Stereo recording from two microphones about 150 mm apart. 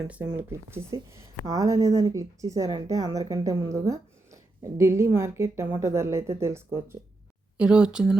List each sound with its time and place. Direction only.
0.3 s a woman's voice: 15° right (ahead or behind)
7.6 s speech: 5° right (ahead or behind)